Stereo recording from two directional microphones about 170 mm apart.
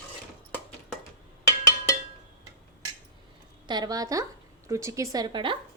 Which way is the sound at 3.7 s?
25° right (ahead or behind).